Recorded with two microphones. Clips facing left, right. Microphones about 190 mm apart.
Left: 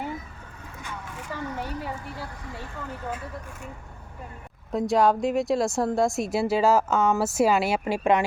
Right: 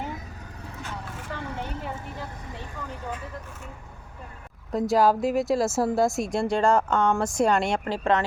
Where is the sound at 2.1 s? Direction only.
20° right (ahead or behind).